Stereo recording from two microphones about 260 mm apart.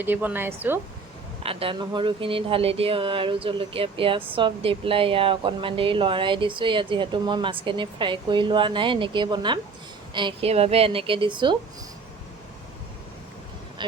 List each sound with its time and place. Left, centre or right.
0.0 s a woman's voice: centre
1.5 s speech: right